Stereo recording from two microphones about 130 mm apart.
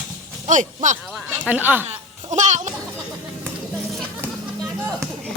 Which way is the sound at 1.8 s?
65° right (ahead or behind).